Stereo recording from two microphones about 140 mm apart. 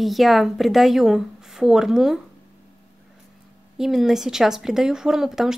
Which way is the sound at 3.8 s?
Centre (ahead or behind).